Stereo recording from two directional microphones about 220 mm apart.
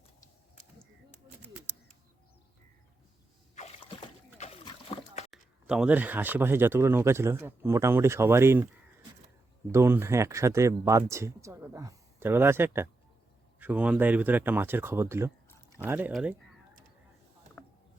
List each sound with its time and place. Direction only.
3.5 s rowboat: 30° left (ahead or behind)
4.4 s splash: 25° left (ahead or behind)
5.3 s speech: 5° right (ahead or behind)
9.7 s speech: 10° right (ahead or behind)
17.6 s a sound: 5° left (ahead or behind)